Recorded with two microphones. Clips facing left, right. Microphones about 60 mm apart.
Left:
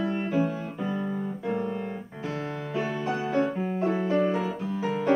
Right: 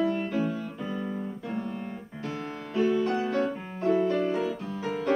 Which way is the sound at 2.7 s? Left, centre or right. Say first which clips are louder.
Right 5 dB; centre.